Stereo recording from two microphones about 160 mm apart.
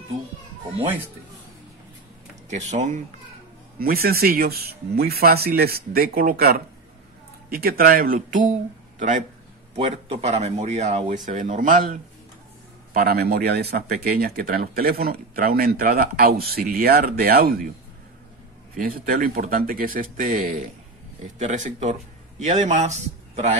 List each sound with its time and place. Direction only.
2.5 s speech: 50° right (ahead or behind)
3.8 s speech: 70° right (ahead or behind); by 8.5 s 55° right (ahead or behind)
9.8 s speech: 40° right (ahead or behind); by 12.0 s 55° right (ahead or behind)
12.9 s speech: 75° right (ahead or behind)
18.8 s speech: 65° right (ahead or behind); by 23.5 s 45° right (ahead or behind)